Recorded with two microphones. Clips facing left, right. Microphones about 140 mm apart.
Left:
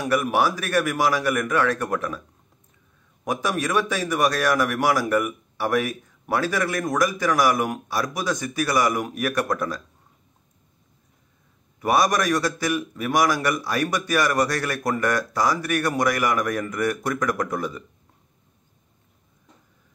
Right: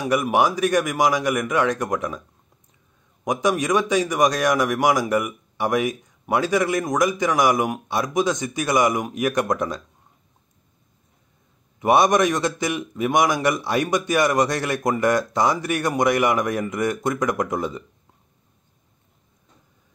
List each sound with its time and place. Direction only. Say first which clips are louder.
0.0 s a man's voice: right 2 dB; 15° right (ahead or behind)
3.3 s a man's voice: right 4 dB; 15° right (ahead or behind)
11.8 s a man's voice: right 4 dB; 25° right (ahead or behind)